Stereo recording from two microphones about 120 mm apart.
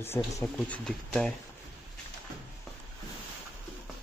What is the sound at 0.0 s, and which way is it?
Speech, 20° left (ahead or behind).